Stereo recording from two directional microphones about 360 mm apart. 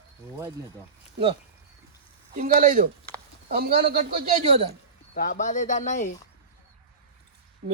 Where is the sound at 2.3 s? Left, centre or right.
Right.